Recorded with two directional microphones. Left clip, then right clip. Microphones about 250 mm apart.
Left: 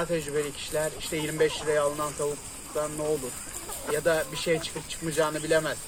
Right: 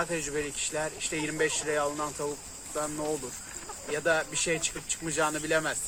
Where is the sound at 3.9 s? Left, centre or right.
Centre.